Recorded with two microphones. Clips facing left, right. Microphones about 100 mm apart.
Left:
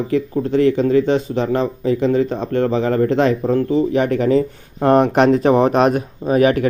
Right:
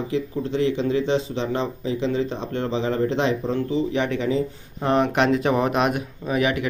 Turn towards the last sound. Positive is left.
turn(degrees=40)  # may be behind; listen again after turning